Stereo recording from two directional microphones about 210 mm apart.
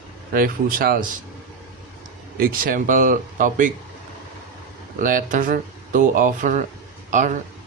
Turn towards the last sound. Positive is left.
turn(degrees=-35)  # may be behind; listen again after turning